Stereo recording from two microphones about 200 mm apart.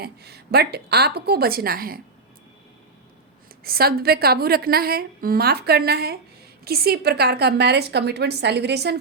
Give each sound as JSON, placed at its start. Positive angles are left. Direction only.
{"t": 0.0, "sound": "a woman's voice", "side_deg": -50}
{"t": 3.6, "sound": "a woman's voice", "side_deg": -50}